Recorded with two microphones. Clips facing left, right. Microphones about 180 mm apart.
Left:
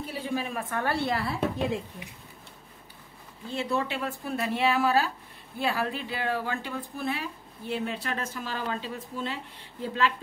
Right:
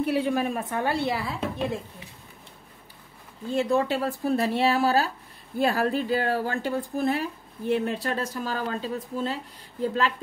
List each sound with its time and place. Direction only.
0.0 s a woman's voice: 65° right (ahead or behind)
0.6 s speech: 20° right (ahead or behind)
1.1 s speech: 5° left (ahead or behind)
3.5 s speech: 45° right (ahead or behind)